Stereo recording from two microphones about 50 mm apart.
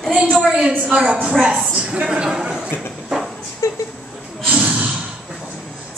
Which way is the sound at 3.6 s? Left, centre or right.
Left.